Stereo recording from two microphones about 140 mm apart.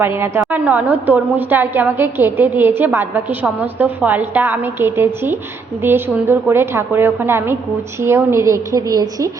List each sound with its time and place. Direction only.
0.0 s a woman's voice: 15° right (ahead or behind)